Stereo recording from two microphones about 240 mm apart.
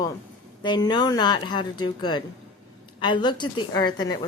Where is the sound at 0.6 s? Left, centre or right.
Centre.